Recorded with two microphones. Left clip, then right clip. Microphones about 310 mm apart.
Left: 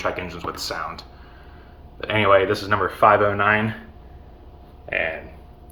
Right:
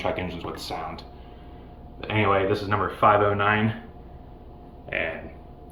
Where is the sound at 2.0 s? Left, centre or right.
Left.